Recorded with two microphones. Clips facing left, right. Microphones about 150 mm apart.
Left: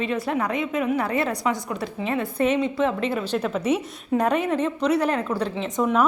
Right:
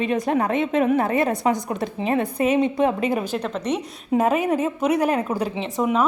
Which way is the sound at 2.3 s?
15° right (ahead or behind).